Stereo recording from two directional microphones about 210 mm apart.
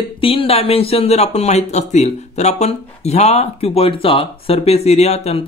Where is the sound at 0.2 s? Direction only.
25° left (ahead or behind).